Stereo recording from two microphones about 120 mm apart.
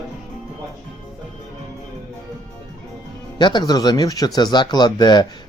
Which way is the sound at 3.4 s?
40° left (ahead or behind).